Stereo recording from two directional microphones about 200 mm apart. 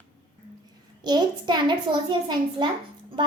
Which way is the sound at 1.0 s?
20° right (ahead or behind).